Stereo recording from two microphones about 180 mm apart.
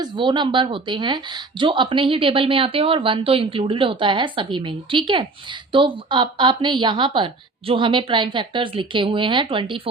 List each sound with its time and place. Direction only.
0.0 s a woman's voice: 25° right (ahead or behind)